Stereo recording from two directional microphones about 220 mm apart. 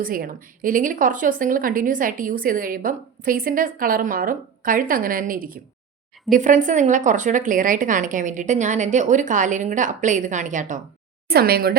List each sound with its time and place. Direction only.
0.0 s a woman's voice: 40° right (ahead or behind)